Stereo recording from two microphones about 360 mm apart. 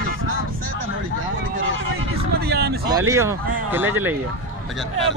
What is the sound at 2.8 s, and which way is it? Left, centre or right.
Speech, centre.